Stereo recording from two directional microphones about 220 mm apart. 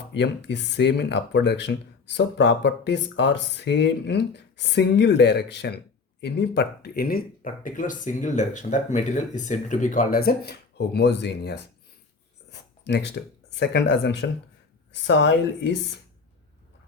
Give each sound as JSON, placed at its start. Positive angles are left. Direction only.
{"t": 0.1, "sound": "speech", "side_deg": 50}
{"t": 12.5, "sound": "a sound", "side_deg": 50}
{"t": 13.6, "sound": "speech", "side_deg": 55}